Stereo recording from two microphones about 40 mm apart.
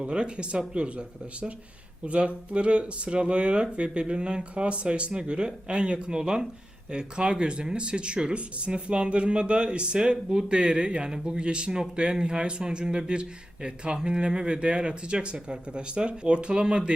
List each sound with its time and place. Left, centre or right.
0.0 s speech: right